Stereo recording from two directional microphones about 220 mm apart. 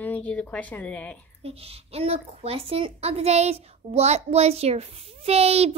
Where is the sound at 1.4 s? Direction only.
25° right (ahead or behind).